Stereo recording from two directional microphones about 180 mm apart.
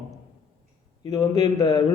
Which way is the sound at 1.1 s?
20° left (ahead or behind).